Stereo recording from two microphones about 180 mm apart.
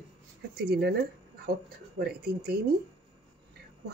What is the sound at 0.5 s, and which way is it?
Speech, 65° right (ahead or behind).